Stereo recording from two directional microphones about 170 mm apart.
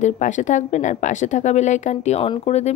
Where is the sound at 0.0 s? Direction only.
45° left (ahead or behind).